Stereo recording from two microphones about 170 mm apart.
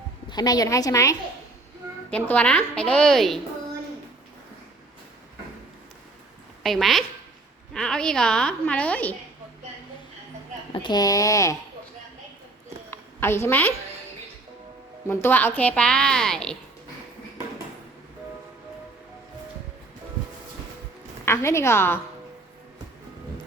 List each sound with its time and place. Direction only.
0.3 s speech: 25° left (ahead or behind)
2.0 s speech: 10° left (ahead or behind)
6.6 s a woman's voice: centre (ahead or behind)
10.7 s speech: 25° left (ahead or behind)
12.9 s a woman's voice: 15° left (ahead or behind)
15.0 s speech: 15° left (ahead or behind)
21.2 s speech: 15° left (ahead or behind)